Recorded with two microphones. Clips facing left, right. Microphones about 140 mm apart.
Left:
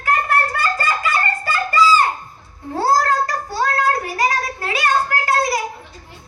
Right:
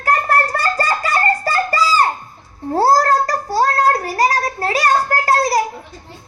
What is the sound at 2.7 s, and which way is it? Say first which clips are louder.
Child singing: right 4 dB; 40° right (ahead or behind).